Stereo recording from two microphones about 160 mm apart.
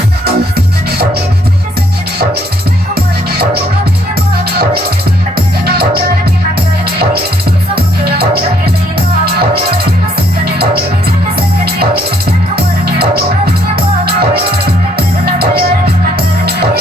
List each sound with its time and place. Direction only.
0.3 s music: 80° right
2.9 s music: 85° right
5.6 s music: 80° right
7.8 s music: 75° right (ahead or behind)
11.3 s music: 75° right (ahead or behind)